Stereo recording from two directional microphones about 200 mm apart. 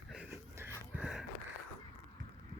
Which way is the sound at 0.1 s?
10° right (ahead or behind).